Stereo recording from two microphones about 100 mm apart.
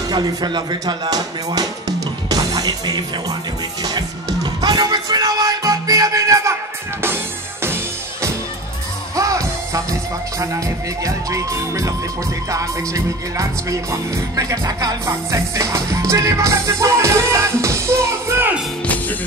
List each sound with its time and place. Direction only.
0.1 s speech: 40° right (ahead or behind)
3.8 s music: 40° right (ahead or behind)
7.6 s music: 25° right (ahead or behind)
9.1 s music: 35° right (ahead or behind)
11.1 s music: 35° right (ahead or behind)